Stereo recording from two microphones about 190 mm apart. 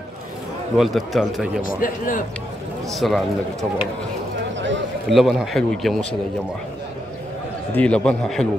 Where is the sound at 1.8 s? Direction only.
45° left (ahead or behind).